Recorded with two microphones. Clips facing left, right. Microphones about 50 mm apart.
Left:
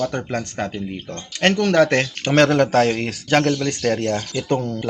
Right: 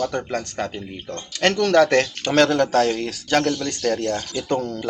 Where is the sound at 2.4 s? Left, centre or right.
Left.